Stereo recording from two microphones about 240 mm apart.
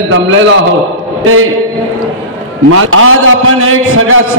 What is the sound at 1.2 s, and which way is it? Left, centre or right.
Speech, right.